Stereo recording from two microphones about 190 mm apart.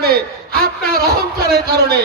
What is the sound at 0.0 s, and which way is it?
A man's voice, 55° right (ahead or behind).